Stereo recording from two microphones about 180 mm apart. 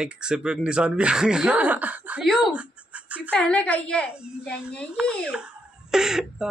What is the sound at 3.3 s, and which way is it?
Speech, 5° left (ahead or behind).